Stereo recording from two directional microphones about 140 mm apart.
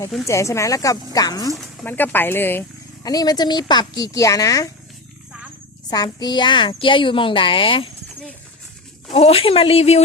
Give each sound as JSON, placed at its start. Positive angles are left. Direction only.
{"t": 0.3, "sound": "speech", "side_deg": 20}
{"t": 1.8, "sound": "speech", "side_deg": 15}
{"t": 3.0, "sound": "speech", "side_deg": 25}
{"t": 5.9, "sound": "speech", "side_deg": 30}
{"t": 9.1, "sound": "speech", "side_deg": 45}